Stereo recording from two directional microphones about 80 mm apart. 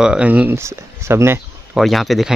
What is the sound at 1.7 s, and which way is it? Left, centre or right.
Speech, centre.